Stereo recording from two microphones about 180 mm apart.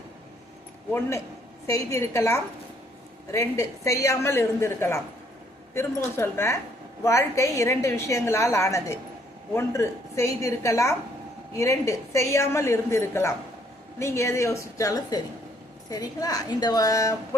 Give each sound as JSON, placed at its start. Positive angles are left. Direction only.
{"t": 0.9, "sound": "a woman's voice", "side_deg": 10}